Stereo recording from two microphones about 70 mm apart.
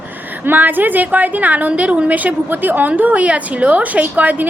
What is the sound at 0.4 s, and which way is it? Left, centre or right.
A woman's voice, right.